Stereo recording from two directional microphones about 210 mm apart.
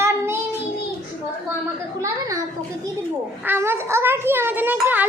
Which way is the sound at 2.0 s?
15° right (ahead or behind).